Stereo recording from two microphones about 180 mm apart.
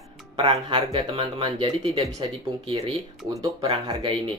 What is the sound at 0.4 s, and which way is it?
Speech, 30° right (ahead or behind).